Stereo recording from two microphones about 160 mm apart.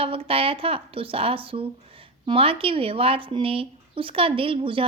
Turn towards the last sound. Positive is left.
turn(degrees=-35)  # may be behind; listen again after turning